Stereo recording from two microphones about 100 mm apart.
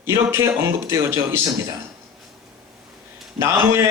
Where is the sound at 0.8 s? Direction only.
30° right (ahead or behind).